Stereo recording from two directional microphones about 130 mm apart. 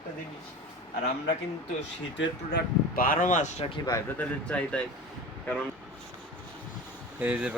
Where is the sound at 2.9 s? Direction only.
90° left; by 3.6 s 70° left (ahead or behind).